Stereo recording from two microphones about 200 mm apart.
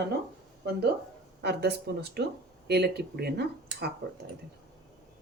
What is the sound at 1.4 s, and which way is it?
Speech, 55° right (ahead or behind).